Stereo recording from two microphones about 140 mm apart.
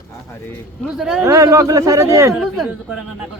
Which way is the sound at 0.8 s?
Centre (ahead or behind).